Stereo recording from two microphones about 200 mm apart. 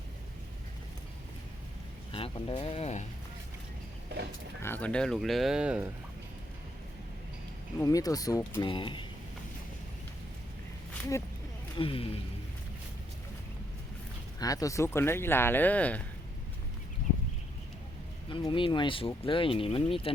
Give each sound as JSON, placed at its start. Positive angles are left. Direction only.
{"t": 2.1, "sound": "speech", "side_deg": 25}
{"t": 4.6, "sound": "speech", "side_deg": 10}
{"t": 7.8, "sound": "speech", "side_deg": 15}
{"t": 11.8, "sound": "speech", "side_deg": 25}
{"t": 14.3, "sound": "speech", "side_deg": 15}
{"t": 18.3, "sound": "speech", "side_deg": 25}